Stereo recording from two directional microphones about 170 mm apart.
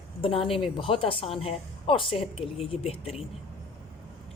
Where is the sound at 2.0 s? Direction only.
Centre (ahead or behind).